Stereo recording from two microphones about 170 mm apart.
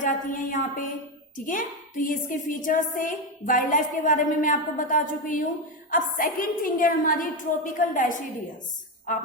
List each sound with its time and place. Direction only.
0.0 s a woman's voice: 50° left (ahead or behind)